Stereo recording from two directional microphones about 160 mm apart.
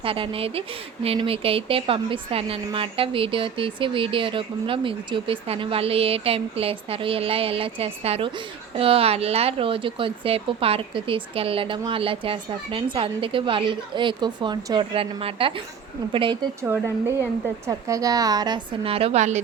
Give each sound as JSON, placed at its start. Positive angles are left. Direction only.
{"t": 0.0, "sound": "a woman's voice", "side_deg": -35}
{"t": 16.6, "sound": "a woman's voice", "side_deg": -15}